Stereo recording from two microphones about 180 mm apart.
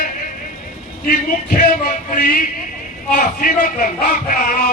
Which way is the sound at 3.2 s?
50° left (ahead or behind).